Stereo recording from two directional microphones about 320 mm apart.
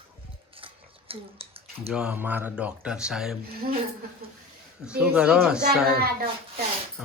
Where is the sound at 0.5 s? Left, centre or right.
Centre.